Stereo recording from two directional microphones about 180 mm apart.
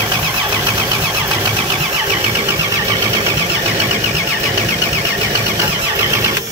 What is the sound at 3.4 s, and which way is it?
Vehicle, 10° right (ahead or behind).